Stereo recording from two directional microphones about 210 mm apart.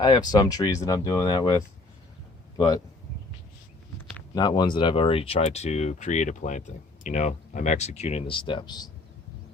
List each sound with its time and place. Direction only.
0.0 s speech: 20° left (ahead or behind)
2.6 s speech: 15° left (ahead or behind)
4.4 s speech: 20° left (ahead or behind)